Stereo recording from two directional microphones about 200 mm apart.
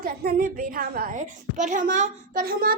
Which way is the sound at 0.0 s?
45° right (ahead or behind).